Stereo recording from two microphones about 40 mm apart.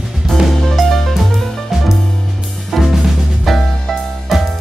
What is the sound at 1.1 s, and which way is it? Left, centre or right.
Music, centre.